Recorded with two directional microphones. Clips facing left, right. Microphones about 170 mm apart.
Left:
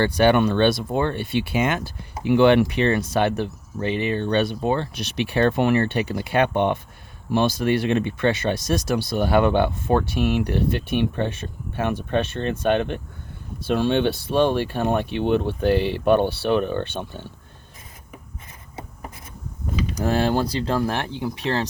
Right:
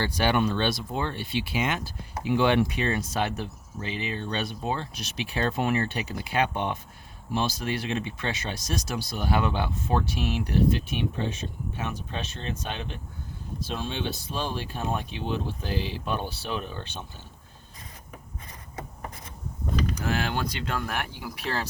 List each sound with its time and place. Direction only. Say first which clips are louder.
0.0 s speech: left 7 dB; 60° left (ahead or behind)
20.0 s speech: left 8 dB; 35° left (ahead or behind)